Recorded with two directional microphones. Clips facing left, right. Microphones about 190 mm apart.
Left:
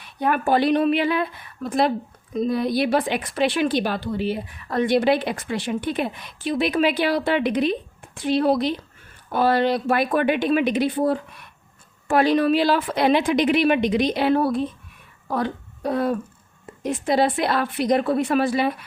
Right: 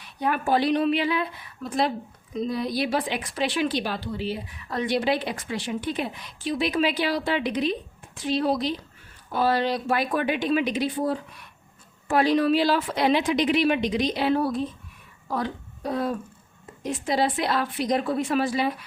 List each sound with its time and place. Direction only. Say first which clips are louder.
0.2 s a woman's voice: left 3 dB; 55° left (ahead or behind)